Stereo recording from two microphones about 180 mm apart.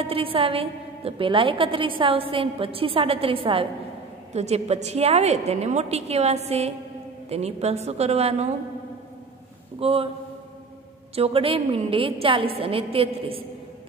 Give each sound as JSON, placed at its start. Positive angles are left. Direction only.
{"t": 0.0, "sound": "a woman's voice", "side_deg": -30}
{"t": 9.8, "sound": "a man's voice", "side_deg": -30}
{"t": 11.1, "sound": "a woman's voice", "side_deg": -30}